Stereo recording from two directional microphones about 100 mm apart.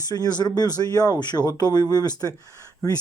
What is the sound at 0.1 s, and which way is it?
Speech, 45° left (ahead or behind).